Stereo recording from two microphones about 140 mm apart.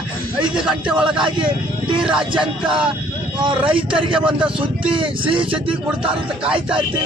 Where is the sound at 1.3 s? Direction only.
35° right (ahead or behind).